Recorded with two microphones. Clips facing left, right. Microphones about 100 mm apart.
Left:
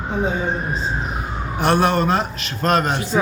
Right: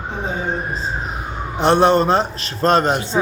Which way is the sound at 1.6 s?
25° right (ahead or behind).